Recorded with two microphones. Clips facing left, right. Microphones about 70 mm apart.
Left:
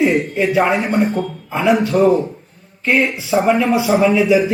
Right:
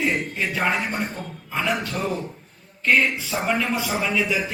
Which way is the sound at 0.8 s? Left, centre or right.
Left.